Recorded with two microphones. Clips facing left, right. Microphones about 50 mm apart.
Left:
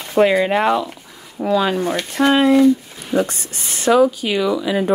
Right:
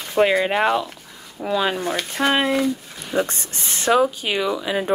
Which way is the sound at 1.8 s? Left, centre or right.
Centre.